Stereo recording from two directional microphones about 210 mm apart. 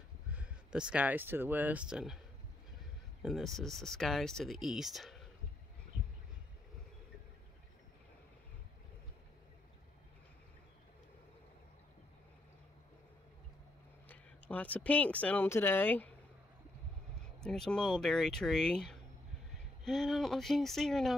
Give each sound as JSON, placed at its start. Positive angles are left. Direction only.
{"t": 0.3, "sound": "speech", "side_deg": -5}
{"t": 3.2, "sound": "speech", "side_deg": 0}
{"t": 14.0, "sound": "speech", "side_deg": 10}
{"t": 17.4, "sound": "speech", "side_deg": 5}